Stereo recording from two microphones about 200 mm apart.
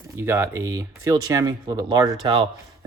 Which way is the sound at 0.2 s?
15° right (ahead or behind).